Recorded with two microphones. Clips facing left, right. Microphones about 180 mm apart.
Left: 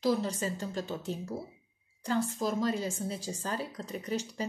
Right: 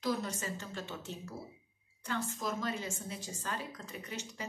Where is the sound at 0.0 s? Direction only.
30° left (ahead or behind).